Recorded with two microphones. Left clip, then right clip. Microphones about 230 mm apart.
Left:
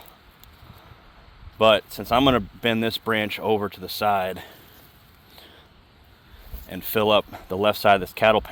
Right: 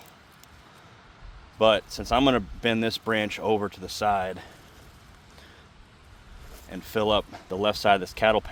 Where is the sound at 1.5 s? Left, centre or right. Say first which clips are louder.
Left 3 dB; left.